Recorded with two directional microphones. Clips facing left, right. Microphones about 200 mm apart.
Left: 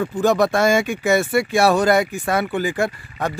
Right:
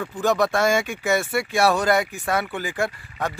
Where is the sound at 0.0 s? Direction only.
25° left (ahead or behind).